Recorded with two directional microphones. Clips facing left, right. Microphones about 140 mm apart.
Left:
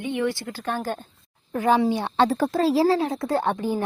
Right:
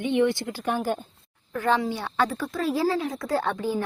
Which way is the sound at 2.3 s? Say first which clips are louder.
Left 6 dB; 40° left (ahead or behind).